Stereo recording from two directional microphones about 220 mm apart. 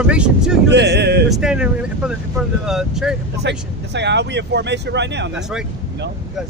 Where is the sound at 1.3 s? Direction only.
5° right (ahead or behind).